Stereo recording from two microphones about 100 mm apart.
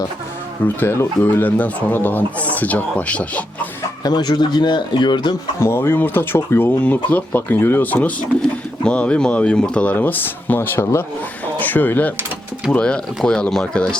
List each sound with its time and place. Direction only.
0.6 s speech: 20° left (ahead or behind)
4.0 s speech: 45° left (ahead or behind)
5.5 s speech: 25° left (ahead or behind); by 13.8 s 5° left (ahead or behind)